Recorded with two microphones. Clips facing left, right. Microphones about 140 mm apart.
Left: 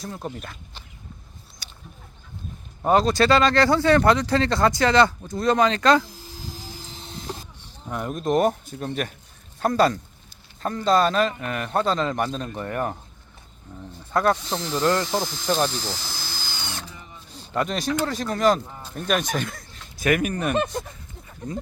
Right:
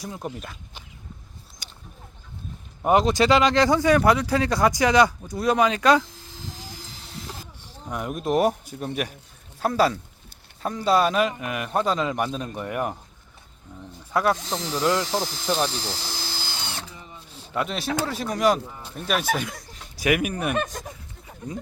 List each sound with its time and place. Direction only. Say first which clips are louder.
0.0 s speech: even; 10° right (ahead or behind)
1.6 s a sound: left 1 dB; 15° right (ahead or behind)
2.8 s speech: even; 15° right (ahead or behind)
7.9 s speech: left 1 dB; 10° right (ahead or behind)
14.1 s speech: left 1 dB; 5° right (ahead or behind)
15.2 s speech: even; 30° right (ahead or behind)
15.7 s drill: even; 30° right (ahead or behind)
17.2 s a sound: left 1 dB; 35° left (ahead or behind)
17.5 s speech: left 2 dB; 5° right (ahead or behind)
20.8 s goat: right 3 dB; 10° right (ahead or behind)